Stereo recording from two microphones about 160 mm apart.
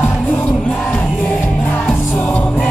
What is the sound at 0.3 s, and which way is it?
Music, 10° left (ahead or behind).